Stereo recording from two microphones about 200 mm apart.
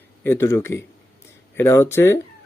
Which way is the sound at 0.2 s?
10° left (ahead or behind).